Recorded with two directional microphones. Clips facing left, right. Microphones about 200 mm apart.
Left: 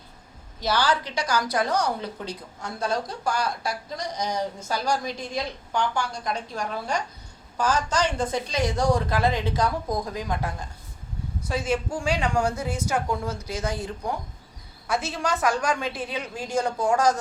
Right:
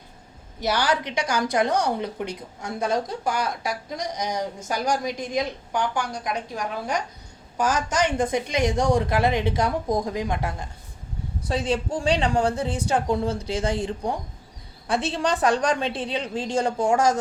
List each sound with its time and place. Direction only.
0.6 s a woman's voice: 20° right (ahead or behind)
11.4 s a woman's voice: 35° right (ahead or behind)